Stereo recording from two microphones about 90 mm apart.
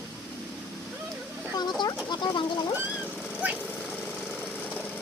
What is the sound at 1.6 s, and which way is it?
Speech, 50° left (ahead or behind).